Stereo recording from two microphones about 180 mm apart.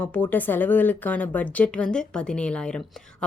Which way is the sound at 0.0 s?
10° left (ahead or behind).